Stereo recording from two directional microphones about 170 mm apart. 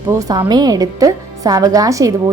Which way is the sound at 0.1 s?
20° right (ahead or behind).